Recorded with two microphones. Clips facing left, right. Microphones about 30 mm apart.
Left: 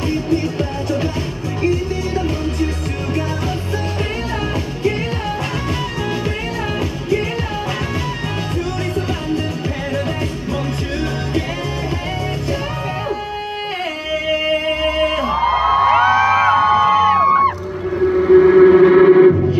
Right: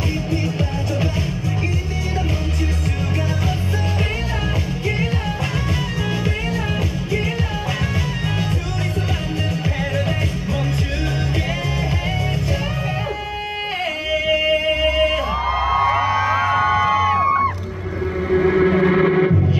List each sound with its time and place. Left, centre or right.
14.3 s music: centre
15.4 s music: left
16.0 s music: left
16.5 s music: left
18.1 s a sound: centre
18.5 s music: centre